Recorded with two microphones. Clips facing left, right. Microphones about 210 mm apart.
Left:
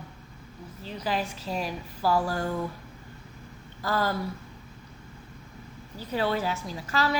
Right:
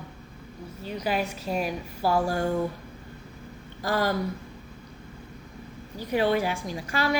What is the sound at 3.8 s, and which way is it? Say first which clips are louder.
Speech: right 2 dB; 15° right (ahead or behind).